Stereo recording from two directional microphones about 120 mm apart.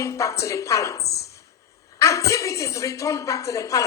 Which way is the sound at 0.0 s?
25° left (ahead or behind).